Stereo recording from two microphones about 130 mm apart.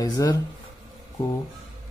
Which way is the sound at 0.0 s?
30° left (ahead or behind).